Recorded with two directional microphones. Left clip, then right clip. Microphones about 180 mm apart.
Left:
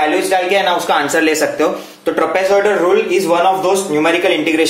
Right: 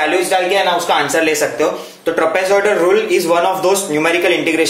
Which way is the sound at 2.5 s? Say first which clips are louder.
Even; 10° right (ahead or behind).